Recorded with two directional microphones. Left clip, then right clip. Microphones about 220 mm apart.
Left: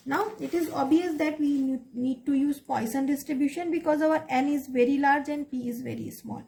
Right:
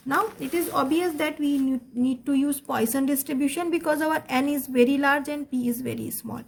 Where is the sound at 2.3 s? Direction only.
40° right (ahead or behind).